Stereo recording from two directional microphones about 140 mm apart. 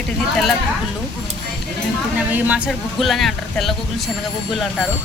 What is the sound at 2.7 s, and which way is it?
A woman's voice, centre (ahead or behind).